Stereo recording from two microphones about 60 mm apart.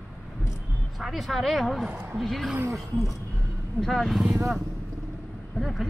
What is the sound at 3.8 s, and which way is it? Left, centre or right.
Speech, centre.